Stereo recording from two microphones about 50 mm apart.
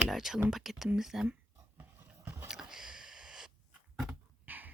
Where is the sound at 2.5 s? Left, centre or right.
Centre.